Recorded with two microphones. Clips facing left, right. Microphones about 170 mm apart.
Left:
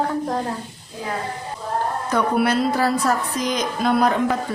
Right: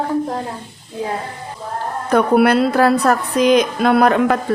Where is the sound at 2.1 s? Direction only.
60° right (ahead or behind).